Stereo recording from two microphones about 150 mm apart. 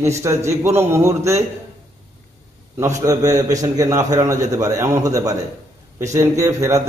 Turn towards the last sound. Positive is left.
turn(degrees=-20)  # may be behind; listen again after turning